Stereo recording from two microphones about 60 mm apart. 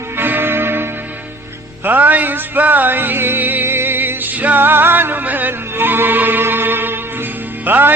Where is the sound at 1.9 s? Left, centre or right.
Right.